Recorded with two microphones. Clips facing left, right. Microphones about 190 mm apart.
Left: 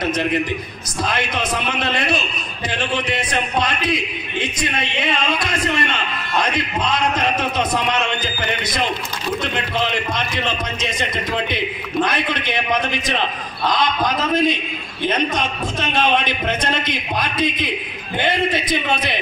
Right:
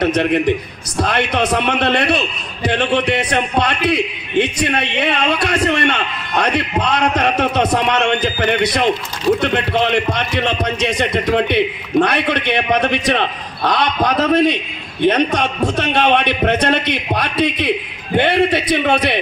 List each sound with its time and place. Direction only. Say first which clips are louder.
0.0 s a man's voice: right 5 dB; 65° right (ahead or behind)